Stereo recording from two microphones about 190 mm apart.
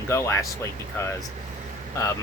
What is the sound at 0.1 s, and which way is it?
Speech, 15° left (ahead or behind).